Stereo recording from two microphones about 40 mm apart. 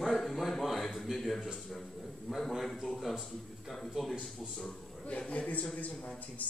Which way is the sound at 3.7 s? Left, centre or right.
Centre.